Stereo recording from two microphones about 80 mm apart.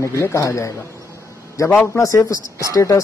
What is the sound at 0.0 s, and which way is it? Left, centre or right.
Speech, left.